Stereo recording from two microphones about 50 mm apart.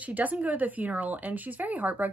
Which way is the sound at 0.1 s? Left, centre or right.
Right.